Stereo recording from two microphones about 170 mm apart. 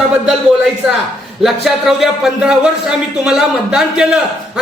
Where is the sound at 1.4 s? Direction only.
Centre (ahead or behind).